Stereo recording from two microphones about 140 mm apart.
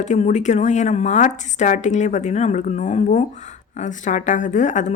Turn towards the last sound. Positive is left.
turn(degrees=60)  # may be behind; listen again after turning